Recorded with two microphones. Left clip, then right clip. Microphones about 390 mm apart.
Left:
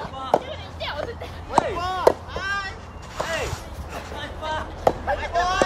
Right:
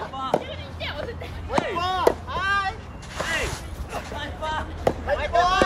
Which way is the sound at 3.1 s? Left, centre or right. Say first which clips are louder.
Even; right.